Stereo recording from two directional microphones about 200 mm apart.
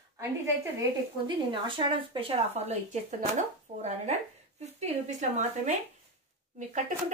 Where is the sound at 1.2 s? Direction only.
25° right (ahead or behind).